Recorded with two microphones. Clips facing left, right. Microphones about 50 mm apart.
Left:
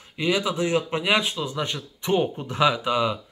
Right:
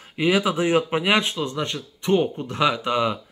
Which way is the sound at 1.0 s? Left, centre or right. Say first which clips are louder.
Right 2 dB; centre.